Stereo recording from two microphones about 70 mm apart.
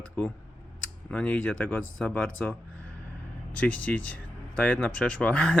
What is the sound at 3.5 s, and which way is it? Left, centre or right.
Speech, left.